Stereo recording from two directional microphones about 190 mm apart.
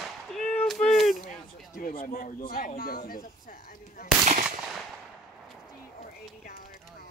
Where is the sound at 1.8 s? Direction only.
50° left (ahead or behind).